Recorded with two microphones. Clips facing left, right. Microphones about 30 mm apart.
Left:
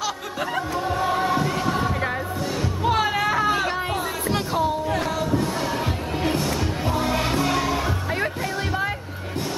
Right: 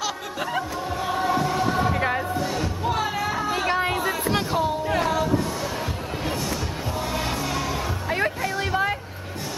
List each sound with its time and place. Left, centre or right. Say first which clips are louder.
0.0 s music: left 1 dB; centre
0.7 s choir: left 4 dB; centre
1.1 s music: left 1 dB; centre
1.9 s music: right 2 dB; centre
2.8 s music: left 6 dB; left
3.3 s a sound: left 5 dB; left
3.7 s music: right 2 dB; centre
4.8 s a sound: right 1 dB; centre
6.4 s music: left 4 dB; centre
8.1 s music: right 1 dB; centre